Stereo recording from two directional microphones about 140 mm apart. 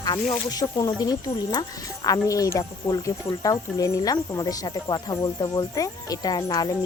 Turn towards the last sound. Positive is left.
turn(degrees=30)  # may be behind; listen again after turning